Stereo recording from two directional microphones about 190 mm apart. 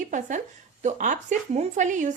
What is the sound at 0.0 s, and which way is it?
A woman's voice, 40° right (ahead or behind).